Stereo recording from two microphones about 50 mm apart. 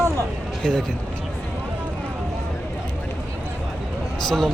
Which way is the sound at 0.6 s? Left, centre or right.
Centre.